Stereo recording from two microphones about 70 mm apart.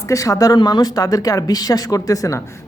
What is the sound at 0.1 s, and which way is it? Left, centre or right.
Speech, left.